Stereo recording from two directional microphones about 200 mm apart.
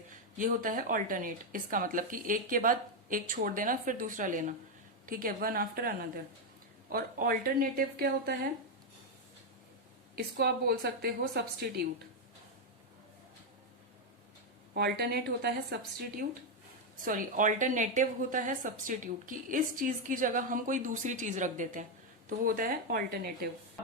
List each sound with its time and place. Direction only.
0.1 s a woman's voice: 40° right (ahead or behind)
10.2 s a woman's voice: 50° right (ahead or behind)
14.7 s a woman's voice: 50° right (ahead or behind)
17.1 s a woman's voice: 40° right (ahead or behind)